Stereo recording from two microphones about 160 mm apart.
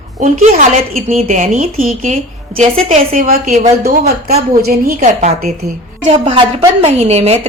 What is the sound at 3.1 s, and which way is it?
A woman's voice, 60° right (ahead or behind).